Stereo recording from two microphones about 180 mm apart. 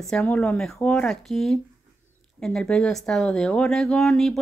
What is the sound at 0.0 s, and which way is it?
A woman's voice, 5° left (ahead or behind).